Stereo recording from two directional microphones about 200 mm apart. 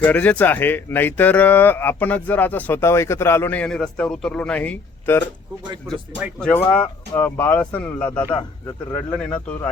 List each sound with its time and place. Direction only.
0.0 s speech: 5° left (ahead or behind)
6.4 s speech: 10° left (ahead or behind)
8.2 s a man's voice: 20° left (ahead or behind)